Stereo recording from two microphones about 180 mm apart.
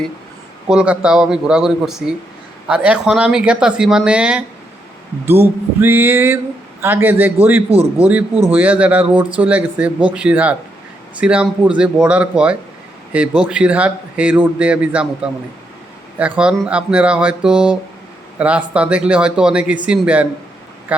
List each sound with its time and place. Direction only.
0.7 s speech: 5° right (ahead or behind)
7.7 s speech: 35° right (ahead or behind)
8.4 s speech: 10° right (ahead or behind)